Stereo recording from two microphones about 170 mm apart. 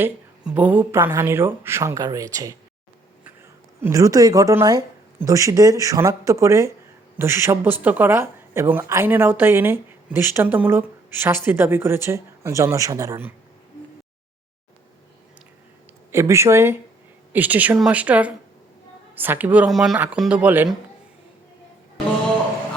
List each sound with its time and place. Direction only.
0.0 s speech: 10° right (ahead or behind)
3.8 s speech: 15° right (ahead or behind)
16.1 s speech: 15° right (ahead or behind)